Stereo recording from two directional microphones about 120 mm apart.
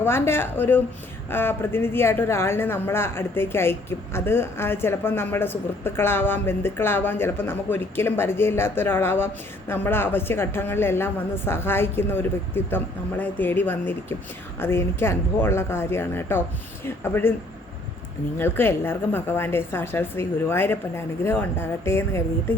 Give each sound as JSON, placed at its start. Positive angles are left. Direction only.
{"t": 0.0, "sound": "a woman's voice", "side_deg": 20}
{"t": 18.3, "sound": "a woman's voice", "side_deg": 20}